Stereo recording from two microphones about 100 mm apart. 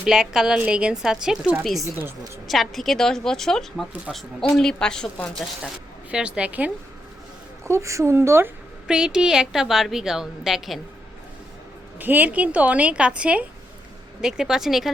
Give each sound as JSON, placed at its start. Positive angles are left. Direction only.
{"t": 0.0, "sound": "a woman's voice", "side_deg": -5}
{"t": 6.1, "sound": "speech", "side_deg": -10}
{"t": 7.6, "sound": "speech", "side_deg": -30}
{"t": 8.9, "sound": "a woman's voice", "side_deg": -10}
{"t": 11.9, "sound": "a woman's voice", "side_deg": -20}